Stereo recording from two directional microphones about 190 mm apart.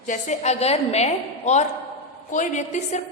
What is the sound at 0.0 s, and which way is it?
A woman's voice, 40° left (ahead or behind).